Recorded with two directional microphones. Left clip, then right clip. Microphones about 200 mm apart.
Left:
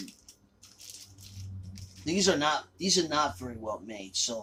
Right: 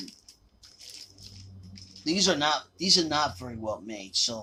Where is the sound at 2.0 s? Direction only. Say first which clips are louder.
Right 2 dB; 35° right (ahead or behind).